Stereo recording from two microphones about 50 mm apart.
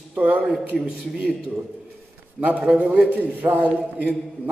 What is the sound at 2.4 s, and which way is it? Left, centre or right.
A man's voice, right.